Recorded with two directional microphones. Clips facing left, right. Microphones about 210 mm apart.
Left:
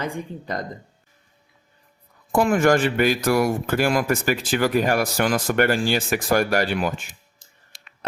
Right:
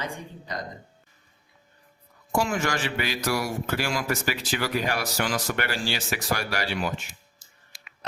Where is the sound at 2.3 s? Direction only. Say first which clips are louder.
Left 9 dB; 55° left (ahead or behind).